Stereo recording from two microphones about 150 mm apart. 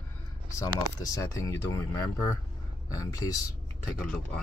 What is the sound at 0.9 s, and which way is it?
Speech, 25° left (ahead or behind).